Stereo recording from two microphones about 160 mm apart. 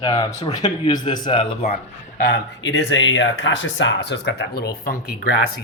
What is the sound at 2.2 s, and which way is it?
Speech, 75° left (ahead or behind).